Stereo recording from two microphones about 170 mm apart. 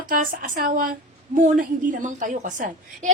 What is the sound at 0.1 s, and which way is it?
A woman's voice, 55° right (ahead or behind).